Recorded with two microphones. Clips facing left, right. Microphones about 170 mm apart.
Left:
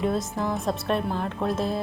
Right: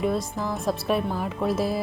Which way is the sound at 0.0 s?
Centre (ahead or behind).